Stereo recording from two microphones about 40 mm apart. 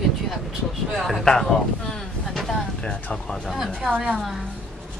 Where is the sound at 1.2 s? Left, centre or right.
Centre.